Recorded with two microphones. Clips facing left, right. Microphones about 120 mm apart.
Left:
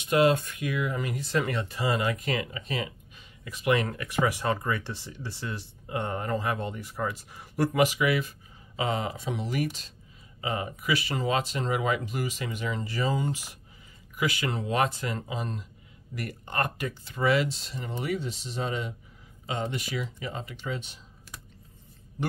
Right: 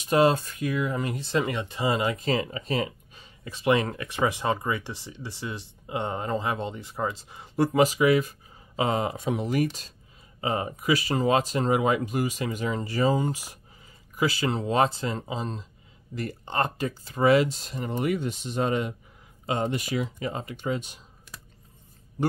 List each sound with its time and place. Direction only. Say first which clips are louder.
0.0 s speech: right 1 dB; 30° right (ahead or behind)
7.8 s speech: right 5 dB; 35° right (ahead or behind)
14.1 s speech: right 4 dB; 35° right (ahead or behind)
17.0 s speech: right 5 dB; 45° right (ahead or behind)